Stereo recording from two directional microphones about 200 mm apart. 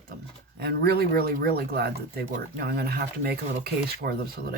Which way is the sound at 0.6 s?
55° right (ahead or behind).